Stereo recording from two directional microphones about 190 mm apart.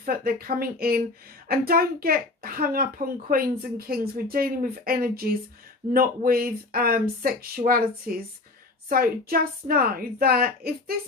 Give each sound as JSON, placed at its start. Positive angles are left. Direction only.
{"t": 0.0, "sound": "a woman's voice", "side_deg": -50}